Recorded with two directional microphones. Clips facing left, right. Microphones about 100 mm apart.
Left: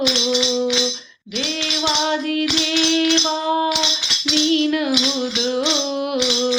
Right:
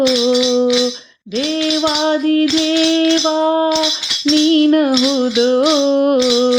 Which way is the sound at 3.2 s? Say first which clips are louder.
Right 6 dB; 40° right (ahead or behind).